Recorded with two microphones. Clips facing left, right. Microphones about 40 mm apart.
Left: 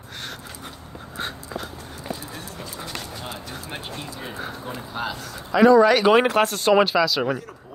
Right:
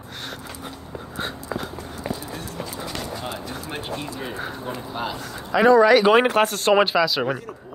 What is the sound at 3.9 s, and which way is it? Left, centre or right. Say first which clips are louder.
Speech: right 4 dB; centre.